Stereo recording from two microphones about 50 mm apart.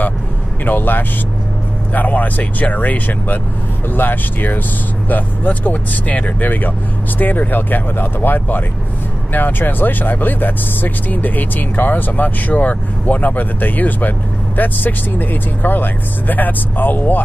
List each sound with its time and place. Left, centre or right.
0.7 s speech: left